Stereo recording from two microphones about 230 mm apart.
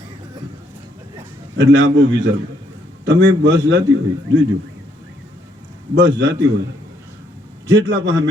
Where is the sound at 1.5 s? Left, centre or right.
Right.